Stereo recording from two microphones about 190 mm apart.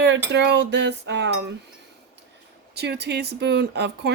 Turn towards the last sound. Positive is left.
turn(degrees=-60)  # may be behind; listen again after turning